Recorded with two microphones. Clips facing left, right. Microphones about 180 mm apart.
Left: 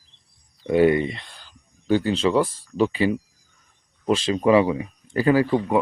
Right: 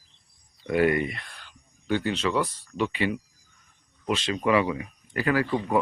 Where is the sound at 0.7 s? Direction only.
25° left (ahead or behind).